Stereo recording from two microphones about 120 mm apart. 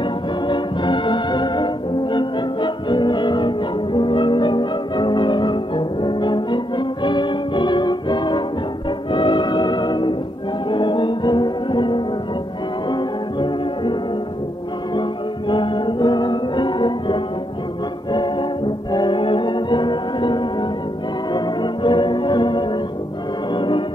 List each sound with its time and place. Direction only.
0.5 s music: 40° left (ahead or behind)
15.0 s music: 40° left (ahead or behind)
18.9 s music: 40° left (ahead or behind)
21.3 s organ: 40° left (ahead or behind)
23.5 s music: 40° left (ahead or behind)